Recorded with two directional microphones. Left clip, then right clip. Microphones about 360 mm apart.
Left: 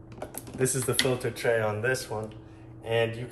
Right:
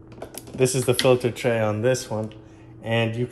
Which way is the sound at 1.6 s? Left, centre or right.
Centre.